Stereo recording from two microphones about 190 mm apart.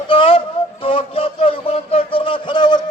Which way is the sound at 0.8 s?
30° left (ahead or behind).